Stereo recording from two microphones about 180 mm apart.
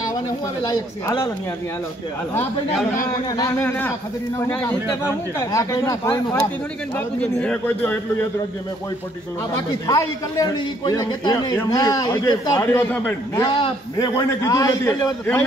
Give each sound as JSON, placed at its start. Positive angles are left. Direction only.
{"t": 1.0, "sound": "speech", "side_deg": 15}
{"t": 3.3, "sound": "speech", "side_deg": 20}
{"t": 7.0, "sound": "speech", "side_deg": 5}
{"t": 9.8, "sound": "a man's voice", "side_deg": 20}
{"t": 13.4, "sound": "a man's voice", "side_deg": 25}